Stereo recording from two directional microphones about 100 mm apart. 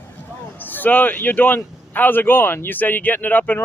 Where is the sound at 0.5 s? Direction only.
20° left (ahead or behind).